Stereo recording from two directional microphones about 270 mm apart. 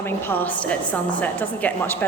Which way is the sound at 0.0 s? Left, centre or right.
Centre.